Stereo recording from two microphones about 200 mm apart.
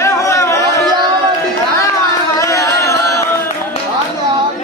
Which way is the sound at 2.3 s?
15° left (ahead or behind).